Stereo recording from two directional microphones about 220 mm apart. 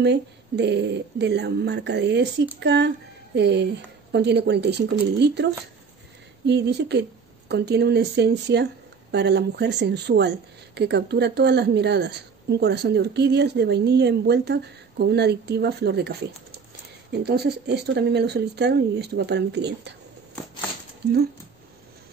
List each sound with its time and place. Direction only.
0.0 s speech: 50° right (ahead or behind)